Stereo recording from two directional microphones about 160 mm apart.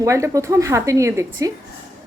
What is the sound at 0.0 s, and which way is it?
Speech, 20° right (ahead or behind).